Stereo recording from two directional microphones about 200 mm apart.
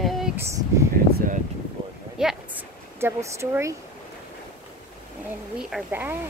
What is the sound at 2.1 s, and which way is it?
Speech, 5° right (ahead or behind).